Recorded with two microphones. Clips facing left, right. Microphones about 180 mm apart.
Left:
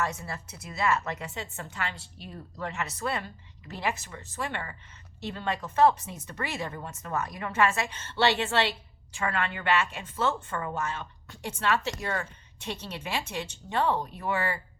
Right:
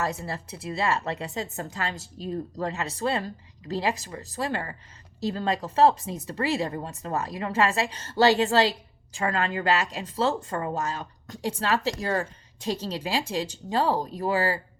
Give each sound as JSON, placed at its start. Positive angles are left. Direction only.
{"t": 0.0, "sound": "speech", "side_deg": -35}